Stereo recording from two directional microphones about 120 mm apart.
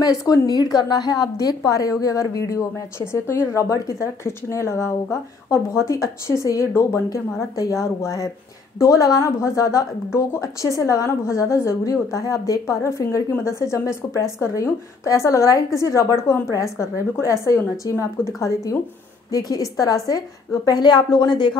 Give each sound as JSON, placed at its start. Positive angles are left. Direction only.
{"t": 0.0, "sound": "a woman's voice", "side_deg": 25}